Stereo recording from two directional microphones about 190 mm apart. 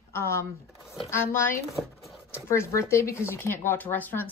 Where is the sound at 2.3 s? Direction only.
15° left (ahead or behind).